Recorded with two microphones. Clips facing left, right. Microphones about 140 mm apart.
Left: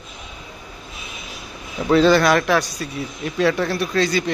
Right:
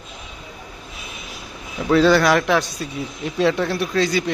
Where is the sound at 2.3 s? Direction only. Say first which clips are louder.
Even; 15° right (ahead or behind).